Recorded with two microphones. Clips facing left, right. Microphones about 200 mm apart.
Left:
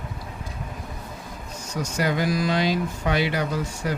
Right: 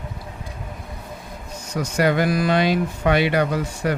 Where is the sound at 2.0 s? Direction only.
65° right (ahead or behind).